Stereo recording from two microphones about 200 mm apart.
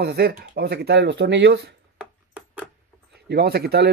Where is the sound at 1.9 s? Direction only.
10° right (ahead or behind).